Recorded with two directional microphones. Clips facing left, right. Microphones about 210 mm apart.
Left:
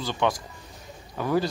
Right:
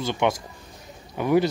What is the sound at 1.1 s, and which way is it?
Speech, 20° right (ahead or behind).